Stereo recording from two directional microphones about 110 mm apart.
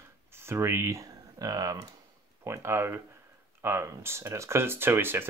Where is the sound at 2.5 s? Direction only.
25° right (ahead or behind).